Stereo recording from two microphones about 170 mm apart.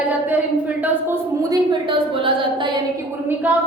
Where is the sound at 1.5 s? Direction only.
30° right (ahead or behind).